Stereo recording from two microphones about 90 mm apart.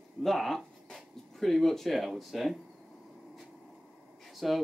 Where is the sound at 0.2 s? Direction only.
Centre (ahead or behind).